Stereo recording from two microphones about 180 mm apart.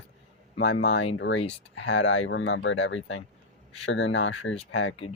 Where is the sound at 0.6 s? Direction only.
90° left.